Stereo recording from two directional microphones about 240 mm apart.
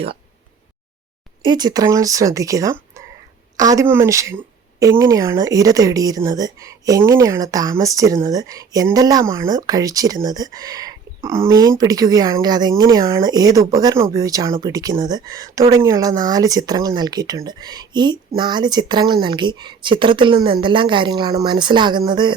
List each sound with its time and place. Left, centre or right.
1.5 s speech: centre